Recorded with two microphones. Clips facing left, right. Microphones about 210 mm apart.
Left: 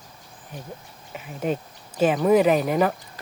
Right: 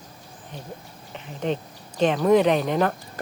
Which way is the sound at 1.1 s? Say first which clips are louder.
Left 1 dB; 10° left (ahead or behind).